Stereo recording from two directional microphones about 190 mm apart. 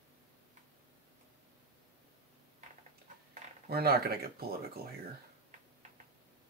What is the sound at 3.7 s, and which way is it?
Speech, 55° right (ahead or behind).